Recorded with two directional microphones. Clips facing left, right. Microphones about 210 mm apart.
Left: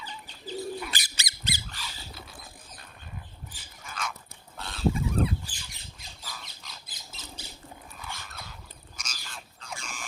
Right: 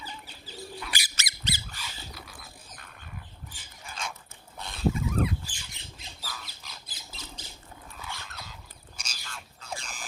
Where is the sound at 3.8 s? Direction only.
30° right (ahead or behind).